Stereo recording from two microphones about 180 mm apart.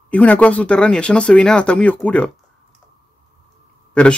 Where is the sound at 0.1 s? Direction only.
10° left (ahead or behind).